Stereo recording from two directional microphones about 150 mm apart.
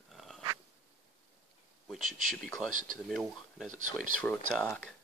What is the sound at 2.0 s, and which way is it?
Speech, 60° right (ahead or behind).